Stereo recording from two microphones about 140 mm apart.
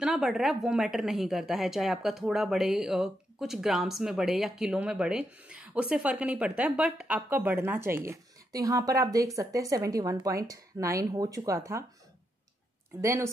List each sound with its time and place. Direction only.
0.0 s a woman's voice: 5° right (ahead or behind); by 11.8 s 20° right (ahead or behind)
13.0 s speech: 20° right (ahead or behind)